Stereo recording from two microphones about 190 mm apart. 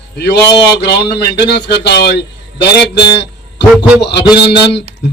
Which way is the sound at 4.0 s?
60° left (ahead or behind).